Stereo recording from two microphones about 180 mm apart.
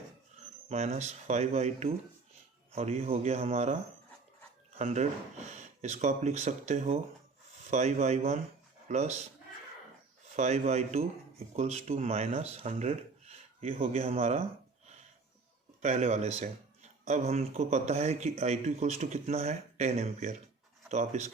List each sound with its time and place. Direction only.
0.7 s speech: 40° right (ahead or behind)
4.8 s speech: 40° right (ahead or behind)
10.3 s speech: 40° right (ahead or behind)
15.8 s speech: 40° right (ahead or behind)